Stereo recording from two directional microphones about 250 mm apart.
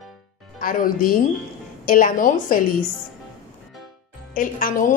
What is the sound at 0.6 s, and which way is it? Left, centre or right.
A woman's voice, left.